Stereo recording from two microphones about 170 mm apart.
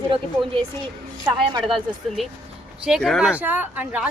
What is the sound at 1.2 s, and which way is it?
Speech, 25° right (ahead or behind).